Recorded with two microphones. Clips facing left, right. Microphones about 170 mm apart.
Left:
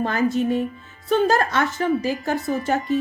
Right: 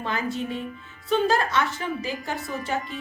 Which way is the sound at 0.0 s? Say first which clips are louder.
Left 8 dB; 45° left (ahead or behind).